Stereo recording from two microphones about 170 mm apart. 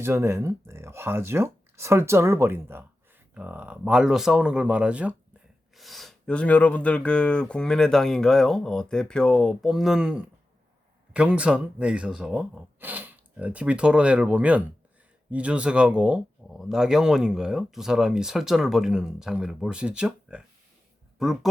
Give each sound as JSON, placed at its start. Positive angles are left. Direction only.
{"t": 0.0, "sound": "speech", "side_deg": -15}